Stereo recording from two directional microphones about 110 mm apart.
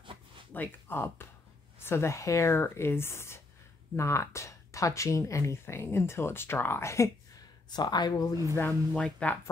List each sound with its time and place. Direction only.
0.5 s speech: 15° left (ahead or behind)
7.7 s speech: 40° left (ahead or behind)
8.5 s speech: 15° left (ahead or behind)